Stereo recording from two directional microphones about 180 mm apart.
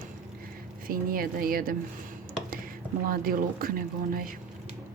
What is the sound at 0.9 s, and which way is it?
Speech, 55° right (ahead or behind).